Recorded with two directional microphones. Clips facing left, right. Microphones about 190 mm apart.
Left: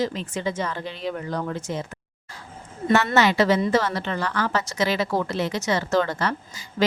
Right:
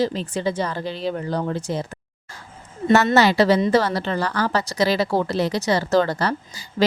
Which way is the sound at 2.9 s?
40° right (ahead or behind).